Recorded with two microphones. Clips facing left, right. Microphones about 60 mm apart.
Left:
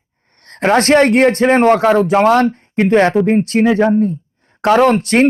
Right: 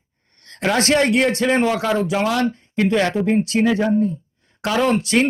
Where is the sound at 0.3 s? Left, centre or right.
Left.